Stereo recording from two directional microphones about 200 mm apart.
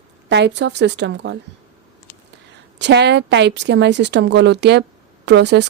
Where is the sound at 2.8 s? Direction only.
60° right (ahead or behind).